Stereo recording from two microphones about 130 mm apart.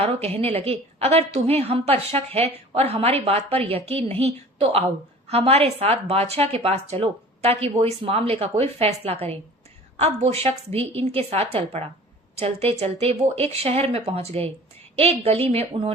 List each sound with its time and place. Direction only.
0.0 s a woman's voice: 55° right (ahead or behind)